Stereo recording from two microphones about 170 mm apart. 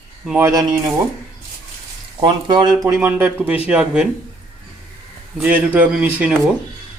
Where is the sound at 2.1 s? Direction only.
25° right (ahead or behind).